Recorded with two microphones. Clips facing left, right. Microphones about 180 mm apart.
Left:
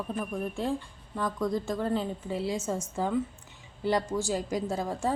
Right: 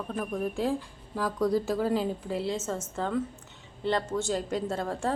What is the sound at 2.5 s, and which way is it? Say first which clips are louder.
A woman's voice: left 1 dB; 10° left (ahead or behind).